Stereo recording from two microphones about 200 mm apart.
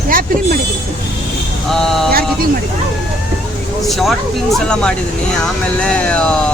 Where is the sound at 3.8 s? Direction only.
Centre (ahead or behind).